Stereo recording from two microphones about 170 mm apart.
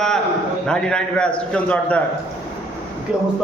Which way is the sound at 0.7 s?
5° left (ahead or behind).